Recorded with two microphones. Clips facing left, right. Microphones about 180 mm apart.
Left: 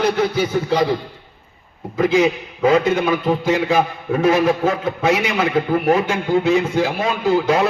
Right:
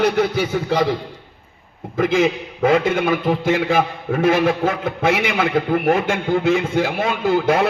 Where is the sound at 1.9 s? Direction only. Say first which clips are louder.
Left 1 dB; 50° right (ahead or behind).